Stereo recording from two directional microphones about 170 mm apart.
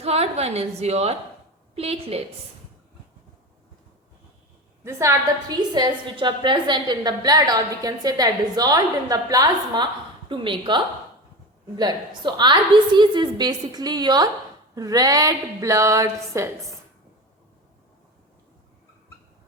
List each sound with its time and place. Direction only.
0.0 s a woman's voice: 40° right (ahead or behind)
4.8 s a woman's voice: 15° right (ahead or behind)